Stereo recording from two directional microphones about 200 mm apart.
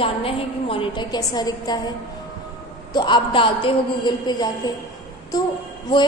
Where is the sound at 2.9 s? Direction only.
20° left (ahead or behind).